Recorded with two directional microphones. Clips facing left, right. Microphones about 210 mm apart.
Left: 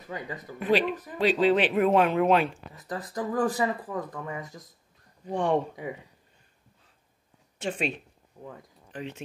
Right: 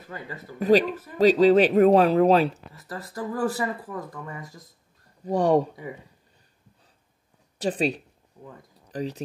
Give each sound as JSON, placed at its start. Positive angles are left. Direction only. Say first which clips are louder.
{"t": 0.1, "sound": "speech", "louder": "left 2 dB", "side_deg": 15}
{"t": 0.6, "sound": "speech", "louder": "right 5 dB", "side_deg": -40}
{"t": 2.7, "sound": "speech", "louder": "left 2 dB", "side_deg": 20}
{"t": 5.2, "sound": "speech", "louder": "right 5 dB", "side_deg": -40}
{"t": 7.5, "sound": "speech", "louder": "right 5 dB", "side_deg": -35}